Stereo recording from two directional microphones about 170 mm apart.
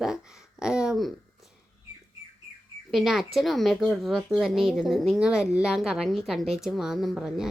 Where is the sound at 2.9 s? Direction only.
Centre (ahead or behind).